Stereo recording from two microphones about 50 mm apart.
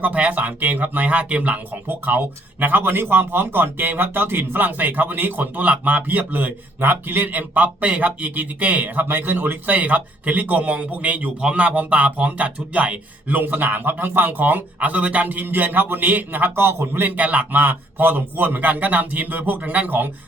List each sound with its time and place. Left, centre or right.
0.0 s speech: right
17.0 s speech: right